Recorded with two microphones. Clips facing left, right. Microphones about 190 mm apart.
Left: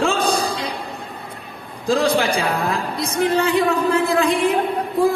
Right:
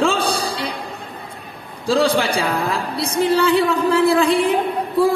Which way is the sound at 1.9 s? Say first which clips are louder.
Right 1 dB; 30° right (ahead or behind).